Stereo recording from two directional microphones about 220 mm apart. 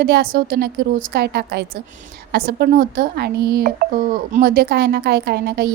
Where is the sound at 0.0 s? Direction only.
45° right (ahead or behind).